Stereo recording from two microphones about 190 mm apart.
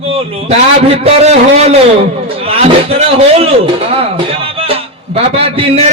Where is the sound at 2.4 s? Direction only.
30° right (ahead or behind).